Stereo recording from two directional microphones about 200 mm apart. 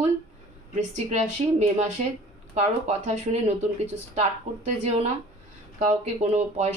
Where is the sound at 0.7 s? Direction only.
35° right (ahead or behind).